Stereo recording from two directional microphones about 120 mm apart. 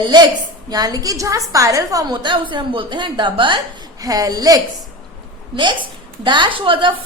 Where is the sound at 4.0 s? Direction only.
30° right (ahead or behind).